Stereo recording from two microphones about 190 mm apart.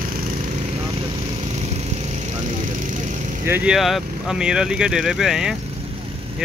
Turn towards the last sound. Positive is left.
turn(degrees=-5)  # may be behind; listen again after turning